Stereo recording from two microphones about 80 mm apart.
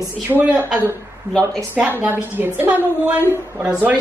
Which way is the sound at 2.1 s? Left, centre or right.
Right.